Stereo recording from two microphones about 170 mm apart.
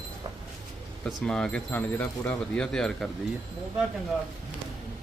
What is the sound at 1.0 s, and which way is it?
Speech, 5° left (ahead or behind).